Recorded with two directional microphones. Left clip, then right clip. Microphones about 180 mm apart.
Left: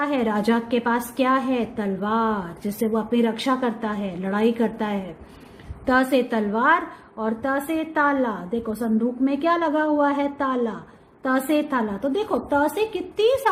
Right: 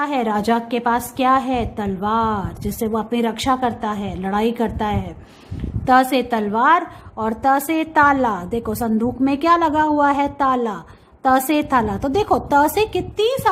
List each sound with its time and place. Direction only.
0.0 s a woman's voice: 20° right (ahead or behind)